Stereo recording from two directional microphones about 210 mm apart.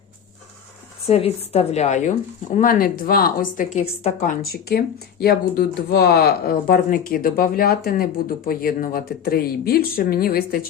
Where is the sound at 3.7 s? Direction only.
30° left (ahead or behind).